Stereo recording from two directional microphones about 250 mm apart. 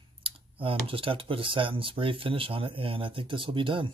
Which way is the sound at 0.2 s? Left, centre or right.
Right.